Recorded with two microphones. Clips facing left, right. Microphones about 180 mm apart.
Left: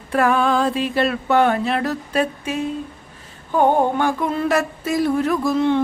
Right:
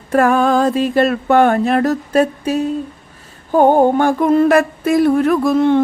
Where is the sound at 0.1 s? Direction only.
45° right (ahead or behind).